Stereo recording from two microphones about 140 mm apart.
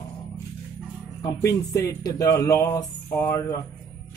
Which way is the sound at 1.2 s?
25° left (ahead or behind).